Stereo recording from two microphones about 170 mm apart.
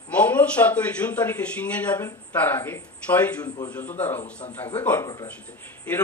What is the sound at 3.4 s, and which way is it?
Speech, 25° left (ahead or behind).